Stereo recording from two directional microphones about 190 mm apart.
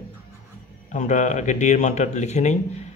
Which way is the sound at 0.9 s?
40° left (ahead or behind).